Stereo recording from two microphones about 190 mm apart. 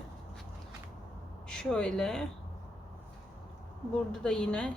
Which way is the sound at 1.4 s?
5° left (ahead or behind).